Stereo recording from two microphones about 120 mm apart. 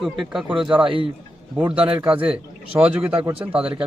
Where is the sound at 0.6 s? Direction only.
10° right (ahead or behind).